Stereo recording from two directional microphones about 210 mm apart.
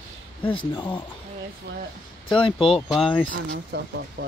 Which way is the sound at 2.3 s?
25° left (ahead or behind).